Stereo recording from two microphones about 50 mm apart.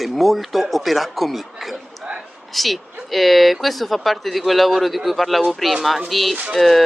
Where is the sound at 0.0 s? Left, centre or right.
Centre.